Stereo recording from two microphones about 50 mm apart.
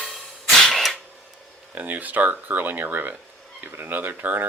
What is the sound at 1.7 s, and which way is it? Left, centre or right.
Speech, right.